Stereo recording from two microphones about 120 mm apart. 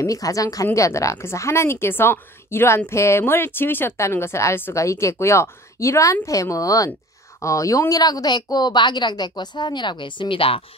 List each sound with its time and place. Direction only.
0.0 s a woman's voice: 30° left (ahead or behind); by 10.6 s 50° left (ahead or behind)